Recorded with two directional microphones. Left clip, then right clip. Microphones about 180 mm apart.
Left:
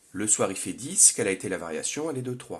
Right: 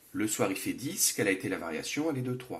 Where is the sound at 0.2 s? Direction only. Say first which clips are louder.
Left 3 dB; 45° left (ahead or behind).